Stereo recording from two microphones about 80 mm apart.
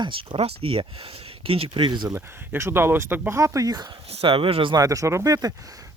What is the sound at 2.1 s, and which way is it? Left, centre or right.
Speech, right.